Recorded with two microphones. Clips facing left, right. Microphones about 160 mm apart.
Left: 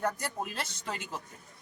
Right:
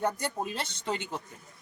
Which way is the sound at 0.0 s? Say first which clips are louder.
Right 3 dB; 25° right (ahead or behind).